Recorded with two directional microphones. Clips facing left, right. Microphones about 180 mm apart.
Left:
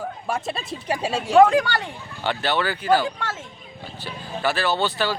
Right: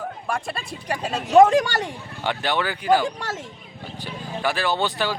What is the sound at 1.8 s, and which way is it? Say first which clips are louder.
Speech: right 1 dB; 15° right (ahead or behind).